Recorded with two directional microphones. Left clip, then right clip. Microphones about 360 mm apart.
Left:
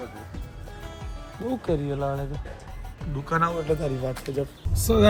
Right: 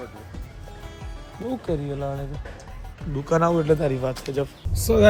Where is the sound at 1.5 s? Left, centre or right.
Centre.